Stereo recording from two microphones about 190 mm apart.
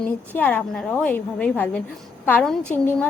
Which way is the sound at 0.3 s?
10° left (ahead or behind).